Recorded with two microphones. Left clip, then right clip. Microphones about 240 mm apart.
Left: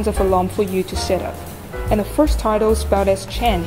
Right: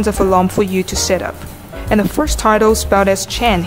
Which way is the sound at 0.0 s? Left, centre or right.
Right.